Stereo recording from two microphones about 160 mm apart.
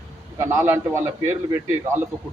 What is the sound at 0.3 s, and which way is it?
Speech, 15° right (ahead or behind).